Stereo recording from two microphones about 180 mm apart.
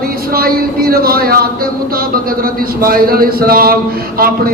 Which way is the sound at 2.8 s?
55° right (ahead or behind).